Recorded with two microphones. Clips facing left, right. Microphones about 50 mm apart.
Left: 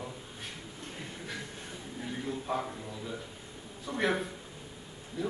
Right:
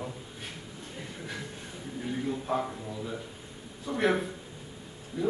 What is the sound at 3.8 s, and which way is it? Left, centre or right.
A man's voice, centre.